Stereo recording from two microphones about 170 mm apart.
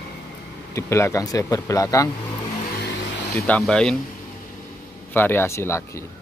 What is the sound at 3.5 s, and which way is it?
Speech, 5° left (ahead or behind).